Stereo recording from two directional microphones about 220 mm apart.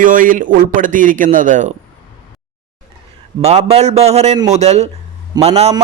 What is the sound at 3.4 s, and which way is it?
Speech, 30° right (ahead or behind).